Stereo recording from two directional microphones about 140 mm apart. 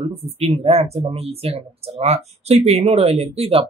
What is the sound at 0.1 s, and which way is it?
Speech, 45° right (ahead or behind).